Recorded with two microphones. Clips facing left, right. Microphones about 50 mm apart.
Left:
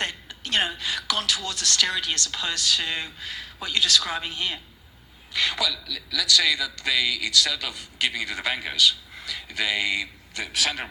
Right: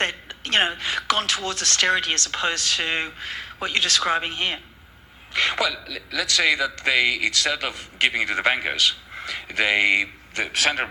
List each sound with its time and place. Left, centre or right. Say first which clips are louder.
0.0 s a man's voice: right 5 dB; right